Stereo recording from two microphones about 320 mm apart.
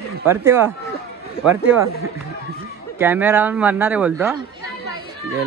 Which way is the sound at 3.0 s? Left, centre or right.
Centre.